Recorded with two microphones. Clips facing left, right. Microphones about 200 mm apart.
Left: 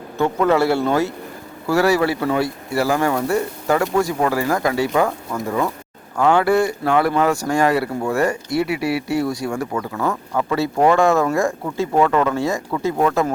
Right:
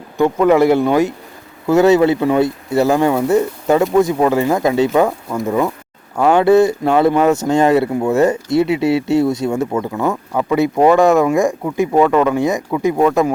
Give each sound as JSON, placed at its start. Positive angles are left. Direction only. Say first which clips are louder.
{"t": 0.2, "sound": "speech", "louder": "right 5 dB", "side_deg": -15}